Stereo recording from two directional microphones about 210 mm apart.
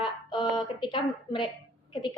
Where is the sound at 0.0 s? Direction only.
20° left (ahead or behind).